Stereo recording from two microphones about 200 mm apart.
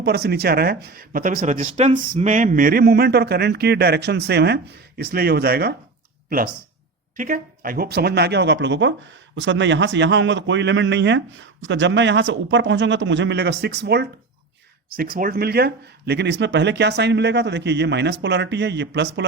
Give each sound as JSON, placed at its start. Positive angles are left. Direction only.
{"t": 0.0, "sound": "speech", "side_deg": -55}
{"t": 7.2, "sound": "speech", "side_deg": -45}